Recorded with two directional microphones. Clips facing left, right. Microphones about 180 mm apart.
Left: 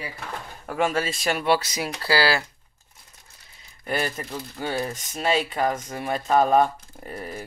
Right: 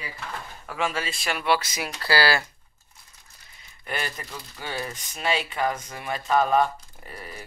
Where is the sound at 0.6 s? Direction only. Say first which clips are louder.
Left 5 dB; 45° left (ahead or behind).